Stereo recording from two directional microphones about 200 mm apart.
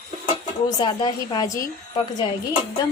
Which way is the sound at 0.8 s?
20° left (ahead or behind).